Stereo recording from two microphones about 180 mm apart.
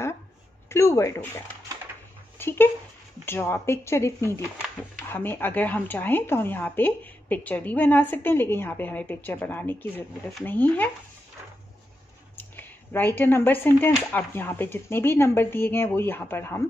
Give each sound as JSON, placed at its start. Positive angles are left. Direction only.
{"t": 0.7, "sound": "speech", "side_deg": 15}
{"t": 2.3, "sound": "speech", "side_deg": 15}
{"t": 12.4, "sound": "speech", "side_deg": 10}